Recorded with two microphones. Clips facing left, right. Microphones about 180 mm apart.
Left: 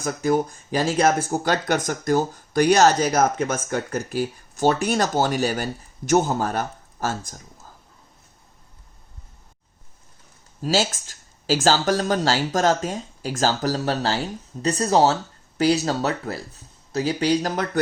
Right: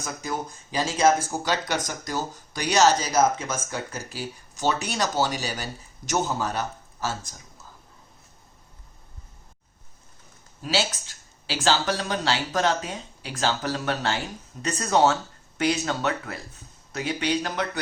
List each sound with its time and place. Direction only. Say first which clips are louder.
0.0 s speech: left 10 dB; 55° left (ahead or behind)
10.6 s speech: left 4 dB; 45° left (ahead or behind)